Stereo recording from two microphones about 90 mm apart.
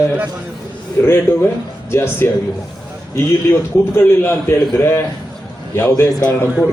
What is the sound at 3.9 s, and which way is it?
A man's voice, 25° left (ahead or behind).